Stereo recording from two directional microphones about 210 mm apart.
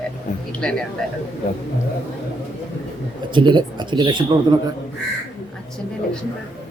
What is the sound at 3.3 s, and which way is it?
A man's voice, 20° right (ahead or behind).